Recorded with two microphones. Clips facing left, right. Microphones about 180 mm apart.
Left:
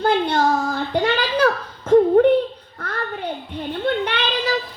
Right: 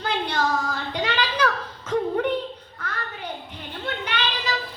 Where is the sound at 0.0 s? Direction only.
50° left (ahead or behind).